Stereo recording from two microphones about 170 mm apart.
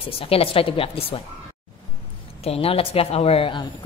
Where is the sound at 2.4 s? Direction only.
35° left (ahead or behind).